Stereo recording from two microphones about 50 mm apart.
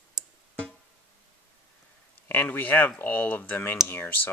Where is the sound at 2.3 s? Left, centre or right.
Left.